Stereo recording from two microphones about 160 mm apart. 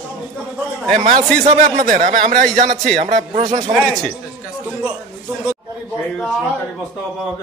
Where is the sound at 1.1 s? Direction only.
45° right (ahead or behind).